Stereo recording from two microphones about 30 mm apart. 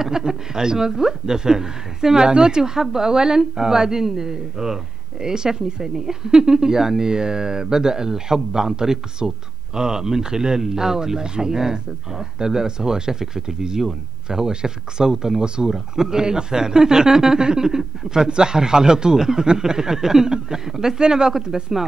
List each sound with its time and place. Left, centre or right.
0.0 s speech: centre
2.2 s speech: right